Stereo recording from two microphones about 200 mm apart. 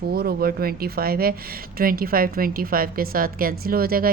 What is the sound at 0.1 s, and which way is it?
Speech, 50° right (ahead or behind).